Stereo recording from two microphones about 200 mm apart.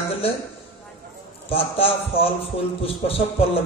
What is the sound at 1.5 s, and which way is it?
A man's voice, 30° left (ahead or behind).